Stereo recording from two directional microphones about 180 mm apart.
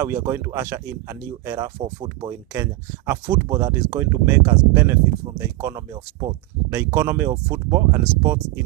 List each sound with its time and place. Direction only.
0.0 s speech: 15° right (ahead or behind)